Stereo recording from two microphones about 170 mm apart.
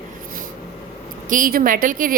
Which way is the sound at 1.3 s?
55° right (ahead or behind).